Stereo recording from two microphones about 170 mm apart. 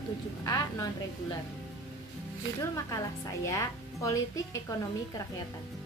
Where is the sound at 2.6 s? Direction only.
20° left (ahead or behind).